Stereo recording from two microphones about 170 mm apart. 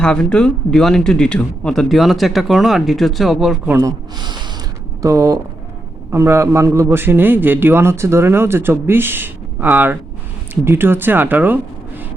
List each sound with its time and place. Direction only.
0.0 s speech: 5° left (ahead or behind)
3.8 s a man's voice: 25° right (ahead or behind)